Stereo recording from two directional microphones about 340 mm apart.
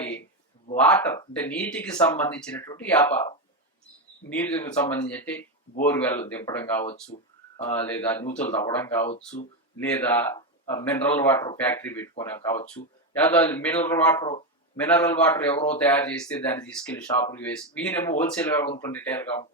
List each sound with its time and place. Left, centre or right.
0.8 s speech: centre
4.3 s speech: centre
6.8 s a sound: centre
7.6 s speech: centre
19.3 s speech: centre